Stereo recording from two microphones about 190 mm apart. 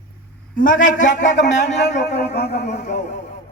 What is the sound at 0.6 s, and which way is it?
A man's voice, 45° left (ahead or behind).